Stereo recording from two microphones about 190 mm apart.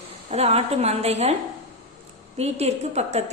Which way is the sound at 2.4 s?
35° right (ahead or behind).